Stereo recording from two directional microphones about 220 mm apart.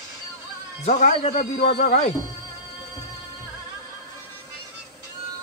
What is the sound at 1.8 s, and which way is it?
Speech, 35° left (ahead or behind).